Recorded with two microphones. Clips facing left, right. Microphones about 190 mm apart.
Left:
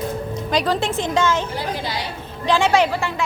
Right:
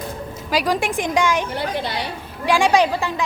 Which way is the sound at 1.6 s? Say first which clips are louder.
Right 1 dB; 60° right (ahead or behind).